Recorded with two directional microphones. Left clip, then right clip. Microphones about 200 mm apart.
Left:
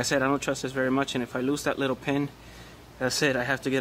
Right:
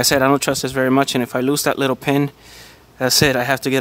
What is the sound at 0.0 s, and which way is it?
Speech, 50° right (ahead or behind).